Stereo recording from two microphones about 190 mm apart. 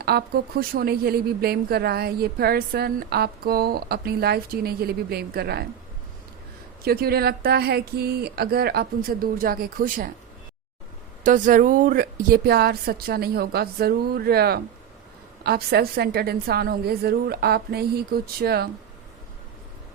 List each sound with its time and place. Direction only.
0.0 s speech: 55° right (ahead or behind)
6.8 s a woman's voice: 55° right (ahead or behind)
11.2 s a woman's voice: 45° right (ahead or behind)